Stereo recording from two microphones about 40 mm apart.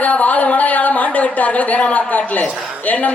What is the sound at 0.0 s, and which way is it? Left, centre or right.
Speech, left.